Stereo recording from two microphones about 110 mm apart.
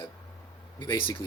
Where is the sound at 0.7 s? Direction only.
40° left (ahead or behind).